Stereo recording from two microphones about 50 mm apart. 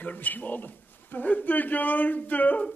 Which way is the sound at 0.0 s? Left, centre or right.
Left.